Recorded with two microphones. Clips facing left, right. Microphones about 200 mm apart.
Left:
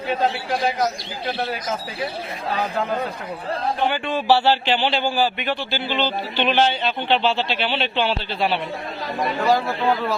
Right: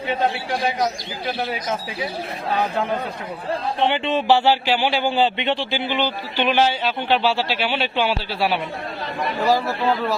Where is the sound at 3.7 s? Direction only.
25° right (ahead or behind).